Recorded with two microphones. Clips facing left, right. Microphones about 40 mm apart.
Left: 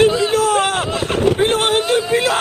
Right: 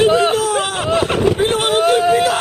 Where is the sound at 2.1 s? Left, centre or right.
Left.